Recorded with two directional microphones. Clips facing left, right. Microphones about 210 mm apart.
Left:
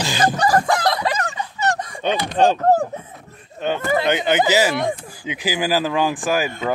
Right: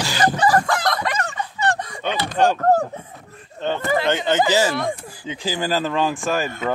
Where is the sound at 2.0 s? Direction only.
20° left (ahead or behind).